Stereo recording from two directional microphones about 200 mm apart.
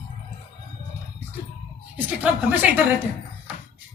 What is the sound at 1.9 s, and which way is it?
Speech, 10° right (ahead or behind).